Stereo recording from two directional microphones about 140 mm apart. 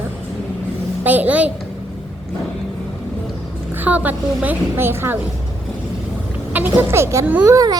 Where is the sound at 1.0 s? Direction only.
10° right (ahead or behind).